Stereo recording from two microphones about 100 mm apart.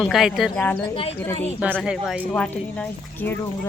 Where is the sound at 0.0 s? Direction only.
5° right (ahead or behind).